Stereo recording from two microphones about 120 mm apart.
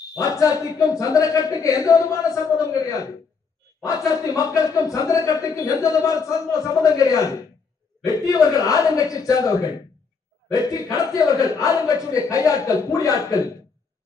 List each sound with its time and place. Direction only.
0.1 s speech: 30° left (ahead or behind)